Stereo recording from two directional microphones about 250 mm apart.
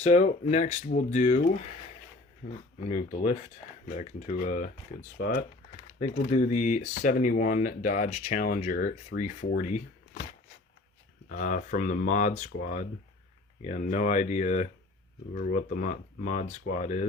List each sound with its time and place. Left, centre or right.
0.0 s speech: left
2.4 s speech: left
2.9 s speech: left
11.3 s speech: left
13.6 s speech: left